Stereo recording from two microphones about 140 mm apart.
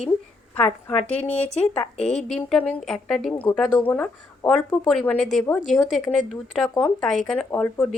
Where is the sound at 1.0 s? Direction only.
10° left (ahead or behind).